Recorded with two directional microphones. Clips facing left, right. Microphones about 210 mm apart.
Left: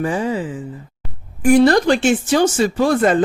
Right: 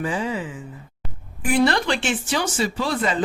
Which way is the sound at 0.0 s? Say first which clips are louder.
Left 5 dB; 45° left (ahead or behind).